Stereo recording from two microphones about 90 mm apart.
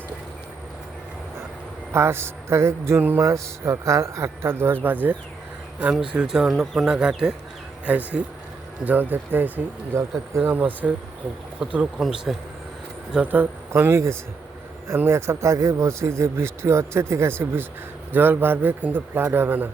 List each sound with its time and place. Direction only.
1.9 s speech: 30° right (ahead or behind)
5.8 s speech: 10° right (ahead or behind); by 10.5 s 30° right (ahead or behind)
10.5 s speech: 20° right (ahead or behind)
13.2 s speech: 20° right (ahead or behind)